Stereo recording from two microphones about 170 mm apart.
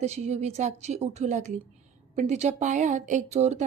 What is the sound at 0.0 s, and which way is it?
A woman's voice, 40° right (ahead or behind).